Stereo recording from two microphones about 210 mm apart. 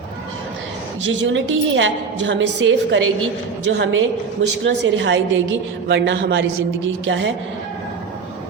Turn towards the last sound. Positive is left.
turn(degrees=-60)  # may be behind; listen again after turning